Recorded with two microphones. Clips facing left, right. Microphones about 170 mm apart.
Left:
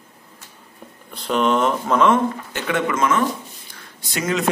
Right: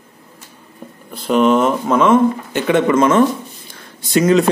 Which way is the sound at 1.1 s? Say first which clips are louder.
Right 6 dB; 5° right (ahead or behind).